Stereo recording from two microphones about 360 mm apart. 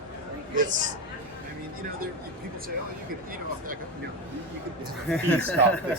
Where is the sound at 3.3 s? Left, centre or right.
Right.